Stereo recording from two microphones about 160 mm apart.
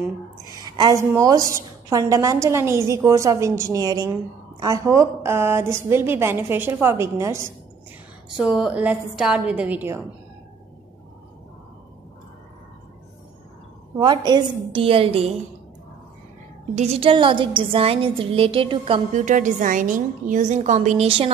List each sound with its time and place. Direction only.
0.7 s a woman's voice: 20° right (ahead or behind)
8.6 s a woman's voice: 5° right (ahead or behind)
13.9 s a woman's voice: 25° right (ahead or behind)
16.7 s a woman's voice: 40° right (ahead or behind)
19.1 s a woman's voice: 50° right (ahead or behind)